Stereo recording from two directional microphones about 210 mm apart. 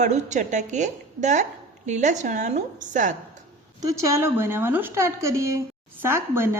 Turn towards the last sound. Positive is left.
turn(degrees=-10)  # may be behind; listen again after turning